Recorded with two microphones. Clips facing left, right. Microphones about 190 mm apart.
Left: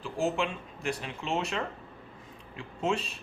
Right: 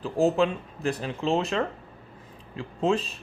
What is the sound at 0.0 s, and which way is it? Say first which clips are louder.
Speech: right 7 dB; 35° right (ahead or behind).